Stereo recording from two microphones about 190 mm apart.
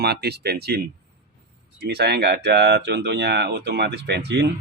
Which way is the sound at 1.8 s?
60° right (ahead or behind).